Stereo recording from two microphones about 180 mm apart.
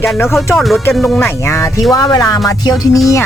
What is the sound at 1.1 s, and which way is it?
Speech, 15° left (ahead or behind).